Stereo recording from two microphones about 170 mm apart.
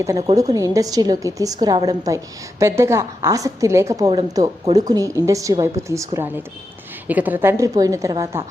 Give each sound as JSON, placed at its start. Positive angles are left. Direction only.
{"t": 0.0, "sound": "a woman's voice", "side_deg": -20}